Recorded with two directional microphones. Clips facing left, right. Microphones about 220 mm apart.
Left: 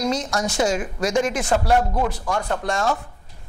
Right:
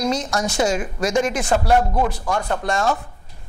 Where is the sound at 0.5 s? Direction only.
15° right (ahead or behind).